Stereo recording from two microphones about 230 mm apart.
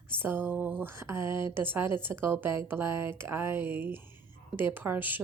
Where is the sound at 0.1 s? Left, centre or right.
Centre.